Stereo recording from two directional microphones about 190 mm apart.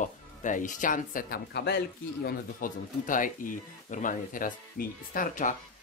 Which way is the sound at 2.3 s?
45° left (ahead or behind).